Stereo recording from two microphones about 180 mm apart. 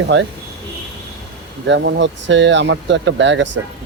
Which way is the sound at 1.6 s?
75° right (ahead or behind).